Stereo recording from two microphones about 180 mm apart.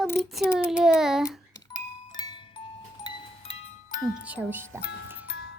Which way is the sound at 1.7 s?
25° left (ahead or behind).